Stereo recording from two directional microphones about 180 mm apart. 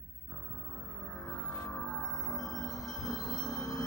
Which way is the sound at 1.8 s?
Centre (ahead or behind).